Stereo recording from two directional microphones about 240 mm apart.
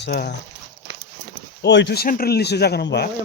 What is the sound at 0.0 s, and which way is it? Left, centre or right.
Speech, left.